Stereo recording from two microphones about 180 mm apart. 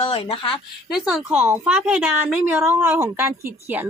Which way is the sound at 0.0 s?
30° left (ahead or behind).